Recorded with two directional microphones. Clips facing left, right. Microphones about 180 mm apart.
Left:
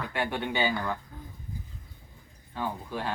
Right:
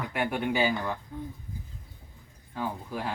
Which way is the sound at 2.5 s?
10° right (ahead or behind).